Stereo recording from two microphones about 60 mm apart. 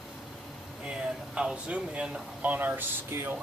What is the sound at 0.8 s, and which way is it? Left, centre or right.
Speech, centre.